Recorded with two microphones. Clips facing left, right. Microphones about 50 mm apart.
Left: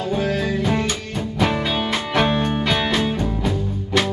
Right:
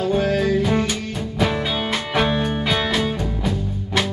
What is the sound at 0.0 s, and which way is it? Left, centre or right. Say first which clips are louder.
Music: right 3 dB; centre.